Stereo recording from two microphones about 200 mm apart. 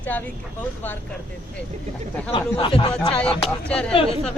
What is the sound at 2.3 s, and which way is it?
Speech, 25° left (ahead or behind).